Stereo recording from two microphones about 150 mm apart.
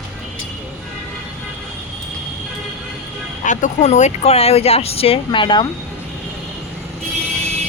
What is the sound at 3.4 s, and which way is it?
Speech, 55° left (ahead or behind).